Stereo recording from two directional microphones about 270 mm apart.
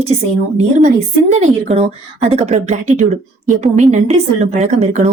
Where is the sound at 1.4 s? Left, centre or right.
Right.